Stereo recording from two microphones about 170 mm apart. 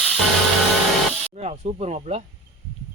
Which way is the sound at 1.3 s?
40° right (ahead or behind).